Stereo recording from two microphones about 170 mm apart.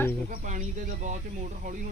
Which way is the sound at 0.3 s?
50° right (ahead or behind).